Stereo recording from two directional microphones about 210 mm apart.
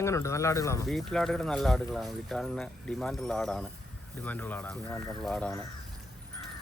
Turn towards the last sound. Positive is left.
turn(degrees=5)  # may be behind; listen again after turning